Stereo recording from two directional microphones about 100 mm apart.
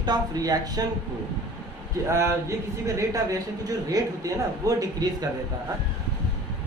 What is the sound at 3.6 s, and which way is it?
A man's voice, 35° right (ahead or behind).